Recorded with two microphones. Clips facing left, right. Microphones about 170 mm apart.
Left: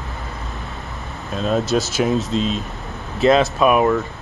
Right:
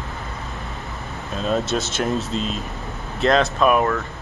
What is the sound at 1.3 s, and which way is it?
Speech, centre (ahead or behind).